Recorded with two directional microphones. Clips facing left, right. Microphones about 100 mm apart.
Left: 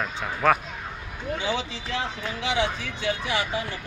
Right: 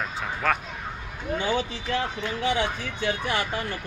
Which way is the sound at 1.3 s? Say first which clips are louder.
Right 3 dB; 50° right (ahead or behind).